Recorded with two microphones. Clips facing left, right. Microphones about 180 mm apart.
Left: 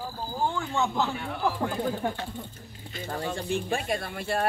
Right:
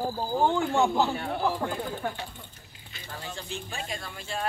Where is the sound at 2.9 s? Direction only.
50° left (ahead or behind).